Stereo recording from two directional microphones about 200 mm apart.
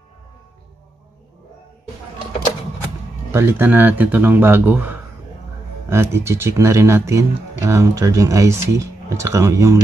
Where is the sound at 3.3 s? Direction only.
10° right (ahead or behind).